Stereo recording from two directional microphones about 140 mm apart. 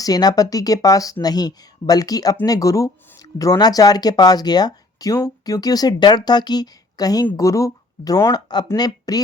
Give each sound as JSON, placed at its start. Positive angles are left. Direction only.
{"t": 0.0, "sound": "speech", "side_deg": 25}